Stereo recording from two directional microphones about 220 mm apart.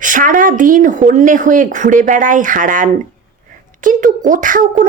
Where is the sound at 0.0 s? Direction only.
35° right (ahead or behind).